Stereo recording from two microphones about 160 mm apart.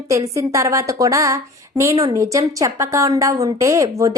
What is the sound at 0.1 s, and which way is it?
A woman's voice, 20° right (ahead or behind).